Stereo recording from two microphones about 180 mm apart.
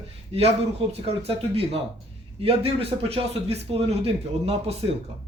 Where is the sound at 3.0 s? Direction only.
30° right (ahead or behind).